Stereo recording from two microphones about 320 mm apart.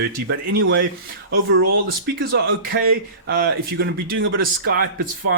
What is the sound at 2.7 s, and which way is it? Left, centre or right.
A man's voice, right.